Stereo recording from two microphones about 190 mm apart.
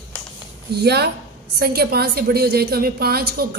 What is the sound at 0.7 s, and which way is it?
A woman's voice, 60° right (ahead or behind).